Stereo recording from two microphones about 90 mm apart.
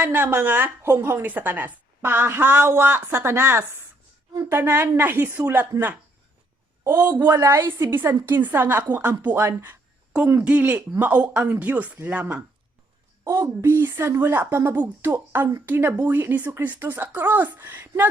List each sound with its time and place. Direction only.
0.0 s a woman's voice: 20° right (ahead or behind)
7.3 s a woman's voice: 35° right (ahead or behind)
10.4 s a woman's voice: 15° right (ahead or behind)
13.2 s a woman's voice: 45° right (ahead or behind)
13.6 s a woman's voice: 25° right (ahead or behind)